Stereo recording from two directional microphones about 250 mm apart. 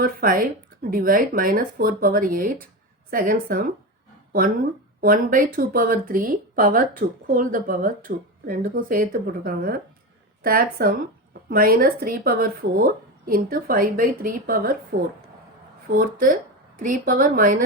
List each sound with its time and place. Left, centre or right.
0.0 s speech: right
16.0 s speech: right